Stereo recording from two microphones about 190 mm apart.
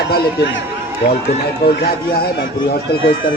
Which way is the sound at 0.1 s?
60° left (ahead or behind).